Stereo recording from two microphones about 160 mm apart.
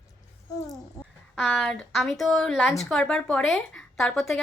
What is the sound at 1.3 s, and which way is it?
A woman's voice, centre (ahead or behind).